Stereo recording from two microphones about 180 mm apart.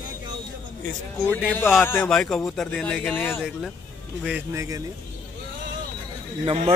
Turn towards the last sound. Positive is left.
turn(degrees=-35)  # may be behind; listen again after turning